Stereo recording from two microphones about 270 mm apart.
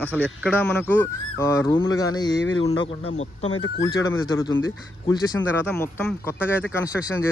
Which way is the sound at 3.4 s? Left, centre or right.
Left.